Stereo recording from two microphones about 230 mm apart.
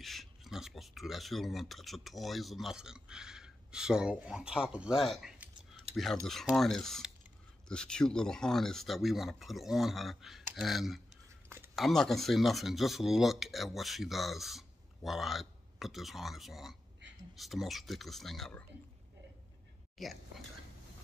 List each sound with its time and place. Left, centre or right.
0.0 s speech: centre
5.9 s cutlery: right
6.2 s speech: centre
11.4 s a sound: centre
11.7 s speech: centre
20.0 s speech: centre